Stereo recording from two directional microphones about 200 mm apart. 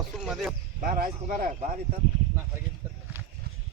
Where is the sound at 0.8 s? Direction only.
45° right (ahead or behind).